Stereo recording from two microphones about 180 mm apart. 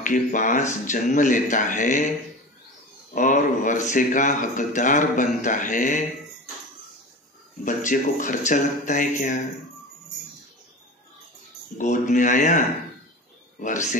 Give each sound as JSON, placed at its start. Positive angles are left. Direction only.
{"t": 0.0, "sound": "speech", "side_deg": 45}
{"t": 3.2, "sound": "speech", "side_deg": 45}
{"t": 7.6, "sound": "speech", "side_deg": 45}
{"t": 11.8, "sound": "speech", "side_deg": 45}